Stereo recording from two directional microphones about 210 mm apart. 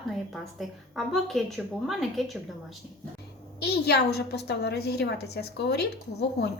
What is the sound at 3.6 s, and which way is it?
A woman's voice, 50° left (ahead or behind).